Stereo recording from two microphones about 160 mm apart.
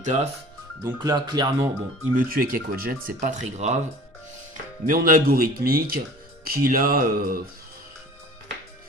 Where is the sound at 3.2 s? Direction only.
50° right (ahead or behind).